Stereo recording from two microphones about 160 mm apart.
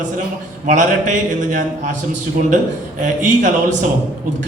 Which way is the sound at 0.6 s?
50° right (ahead or behind).